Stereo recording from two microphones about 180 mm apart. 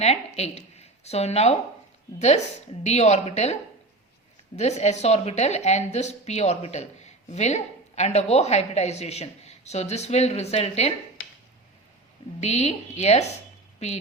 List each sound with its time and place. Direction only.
0.3 s a woman's voice: 35° left (ahead or behind)
12.4 s a woman's voice: 35° left (ahead or behind)